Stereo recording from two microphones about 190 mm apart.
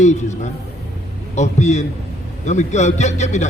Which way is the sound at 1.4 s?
40° left (ahead or behind).